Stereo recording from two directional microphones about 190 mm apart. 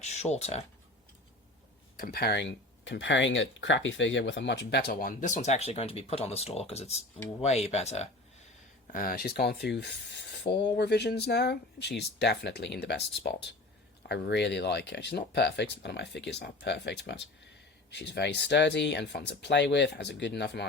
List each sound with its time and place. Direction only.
0.0 s speech: 35° left (ahead or behind)
2.0 s speech: 55° left (ahead or behind); by 8.1 s 35° left (ahead or behind)
8.9 s speech: 50° left (ahead or behind)